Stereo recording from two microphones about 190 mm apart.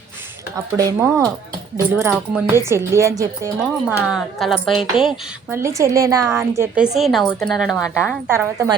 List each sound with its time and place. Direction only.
0.5 s a woman's voice: 15° right (ahead or behind)
4.0 s a woman's voice: centre (ahead or behind)
5.5 s a woman's voice: 15° right (ahead or behind)
6.6 s a woman's voice: 5° right (ahead or behind)